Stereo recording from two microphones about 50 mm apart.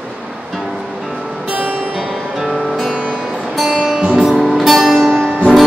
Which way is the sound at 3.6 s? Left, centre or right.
Centre.